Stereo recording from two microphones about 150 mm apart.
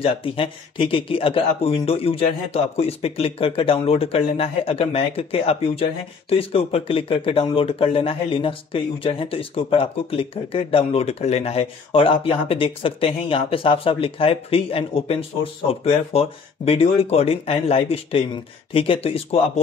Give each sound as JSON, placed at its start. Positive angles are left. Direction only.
{"t": 0.0, "sound": "speech", "side_deg": 35}